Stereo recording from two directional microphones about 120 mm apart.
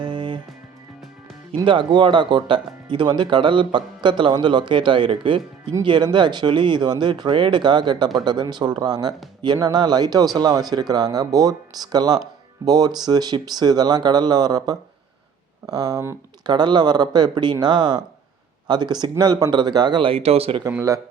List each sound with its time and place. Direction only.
0.0 s music: 40° right (ahead or behind)
1.6 s speech: 45° right (ahead or behind)
20.7 s speech: 25° right (ahead or behind)